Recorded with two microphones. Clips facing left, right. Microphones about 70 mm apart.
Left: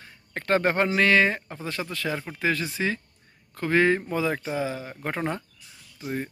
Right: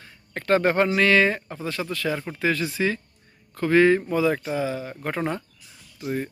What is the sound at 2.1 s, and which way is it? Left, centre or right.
Speech, centre.